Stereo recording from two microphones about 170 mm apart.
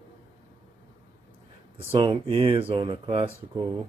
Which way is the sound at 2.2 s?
30° right (ahead or behind).